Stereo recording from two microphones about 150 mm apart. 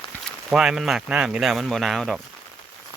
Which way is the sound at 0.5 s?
5° right (ahead or behind).